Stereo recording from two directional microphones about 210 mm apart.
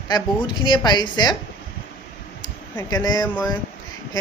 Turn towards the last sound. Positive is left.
turn(degrees=15)  # may be behind; listen again after turning